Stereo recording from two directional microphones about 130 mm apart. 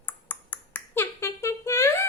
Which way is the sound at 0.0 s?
15° left (ahead or behind).